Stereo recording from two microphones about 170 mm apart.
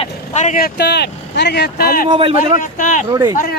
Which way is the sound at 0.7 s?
75° left (ahead or behind).